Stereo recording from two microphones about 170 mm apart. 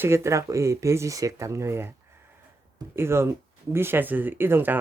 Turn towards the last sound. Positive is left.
turn(degrees=-15)  # may be behind; listen again after turning